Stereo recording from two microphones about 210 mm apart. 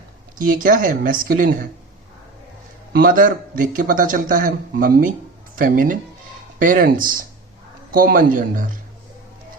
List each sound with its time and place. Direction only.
0.3 s speech: 40° right (ahead or behind)
2.9 s speech: 40° right (ahead or behind)